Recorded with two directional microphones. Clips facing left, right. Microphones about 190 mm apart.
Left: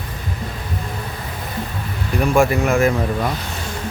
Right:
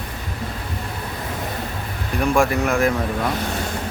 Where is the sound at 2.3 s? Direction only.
Centre (ahead or behind).